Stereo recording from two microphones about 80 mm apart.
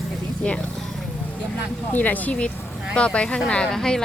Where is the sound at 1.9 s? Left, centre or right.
Left.